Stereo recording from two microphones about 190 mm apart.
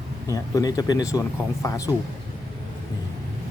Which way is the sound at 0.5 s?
20° left (ahead or behind).